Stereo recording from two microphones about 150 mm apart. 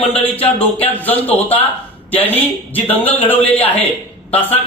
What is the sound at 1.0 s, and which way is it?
A man's voice, 10° left (ahead or behind).